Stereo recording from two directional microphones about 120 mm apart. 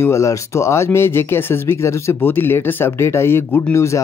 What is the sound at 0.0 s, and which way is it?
Speech, 25° left (ahead or behind).